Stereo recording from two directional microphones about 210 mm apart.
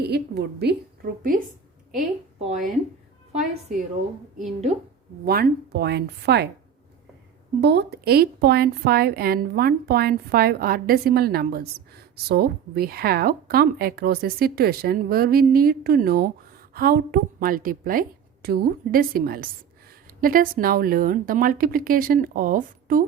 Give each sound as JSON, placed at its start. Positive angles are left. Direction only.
{"t": 0.0, "sound": "a woman's voice", "side_deg": -50}
{"t": 2.4, "sound": "speech", "side_deg": -35}
{"t": 5.2, "sound": "a woman's voice", "side_deg": -45}
{"t": 7.6, "sound": "a woman's voice", "side_deg": -55}